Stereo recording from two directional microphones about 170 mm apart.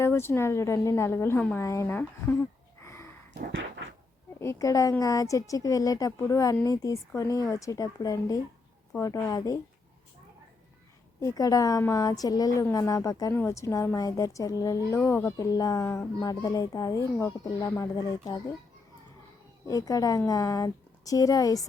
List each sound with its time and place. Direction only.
0.0 s a woman's voice: 15° left (ahead or behind)
3.3 s a sound: 90° right
4.4 s a woman's voice: 15° left (ahead or behind)
11.2 s a woman's voice: 20° left (ahead or behind)
19.6 s a woman's voice: 20° left (ahead or behind)